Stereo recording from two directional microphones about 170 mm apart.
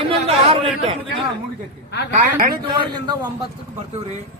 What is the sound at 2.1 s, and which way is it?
Speech, 60° right (ahead or behind).